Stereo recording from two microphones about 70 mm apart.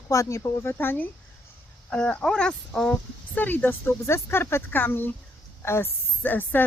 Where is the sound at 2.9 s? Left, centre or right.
Left.